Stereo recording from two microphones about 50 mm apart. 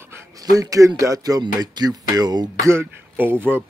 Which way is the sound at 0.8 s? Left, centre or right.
Right.